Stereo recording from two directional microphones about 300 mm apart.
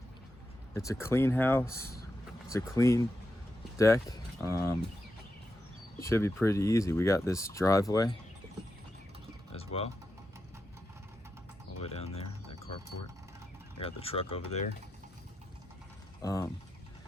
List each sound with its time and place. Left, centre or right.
0.7 s speech: centre
6.0 s speech: centre
9.5 s a sound: centre
11.8 s speech: centre
13.7 s speech: centre
16.2 s speech: centre